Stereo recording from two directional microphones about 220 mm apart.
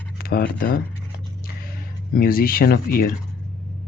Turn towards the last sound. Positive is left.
turn(degrees=40)  # may be behind; listen again after turning